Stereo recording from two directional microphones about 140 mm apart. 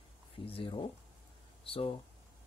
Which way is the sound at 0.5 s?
40° left (ahead or behind).